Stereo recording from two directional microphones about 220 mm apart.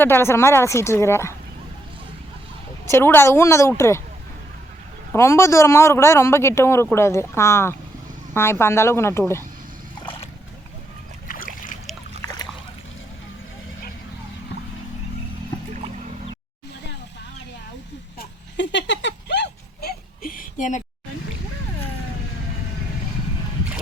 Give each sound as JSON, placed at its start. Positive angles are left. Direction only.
{"t": 0.0, "sound": "speech", "side_deg": 10}
{"t": 2.8, "sound": "speech", "side_deg": 10}
{"t": 5.1, "sound": "speech", "side_deg": 10}
{"t": 18.2, "sound": "a sound", "side_deg": 55}